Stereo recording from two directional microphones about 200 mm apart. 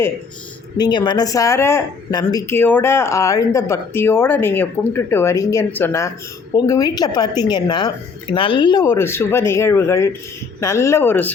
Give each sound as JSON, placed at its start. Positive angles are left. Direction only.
{"t": 0.8, "sound": "a woman's voice", "side_deg": 20}